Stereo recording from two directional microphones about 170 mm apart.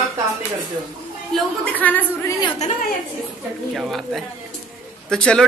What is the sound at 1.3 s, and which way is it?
A woman's voice, 5° left (ahead or behind).